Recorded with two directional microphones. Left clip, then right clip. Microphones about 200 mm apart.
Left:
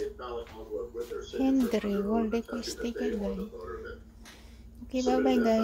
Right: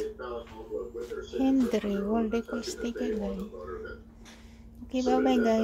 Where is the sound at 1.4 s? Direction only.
Centre (ahead or behind).